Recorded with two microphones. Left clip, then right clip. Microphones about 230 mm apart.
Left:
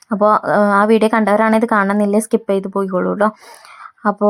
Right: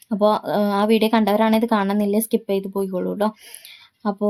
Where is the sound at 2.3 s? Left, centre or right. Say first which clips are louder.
Left 5 dB; left.